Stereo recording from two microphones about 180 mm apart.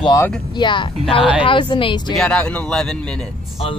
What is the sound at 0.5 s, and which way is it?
Speech, 25° left (ahead or behind).